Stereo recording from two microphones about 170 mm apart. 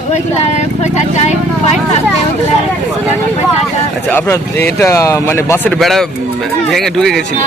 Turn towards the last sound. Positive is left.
turn(degrees=0)  # may be behind; listen again after turning